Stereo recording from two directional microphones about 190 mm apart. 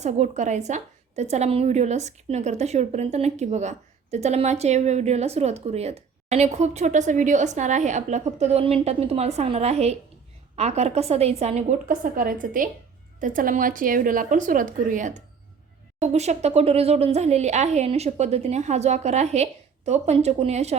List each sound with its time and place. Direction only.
0.0 s a woman's voice: 35° right (ahead or behind)